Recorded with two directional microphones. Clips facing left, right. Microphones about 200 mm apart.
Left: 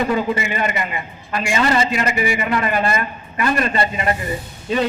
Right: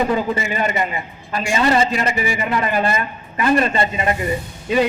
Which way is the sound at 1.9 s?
35° right (ahead or behind).